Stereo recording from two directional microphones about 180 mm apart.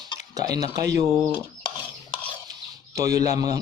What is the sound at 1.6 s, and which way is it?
Stir, 30° left (ahead or behind).